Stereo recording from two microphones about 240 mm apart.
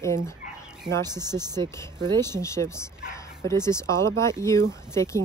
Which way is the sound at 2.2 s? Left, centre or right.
Centre.